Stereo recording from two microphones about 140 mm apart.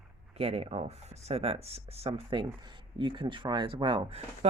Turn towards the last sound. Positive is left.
turn(degrees=-45)  # may be behind; listen again after turning